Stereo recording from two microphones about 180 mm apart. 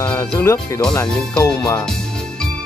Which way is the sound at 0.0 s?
10° left (ahead or behind).